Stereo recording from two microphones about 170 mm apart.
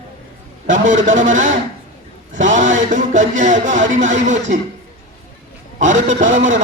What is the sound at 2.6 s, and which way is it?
Music, 90° right.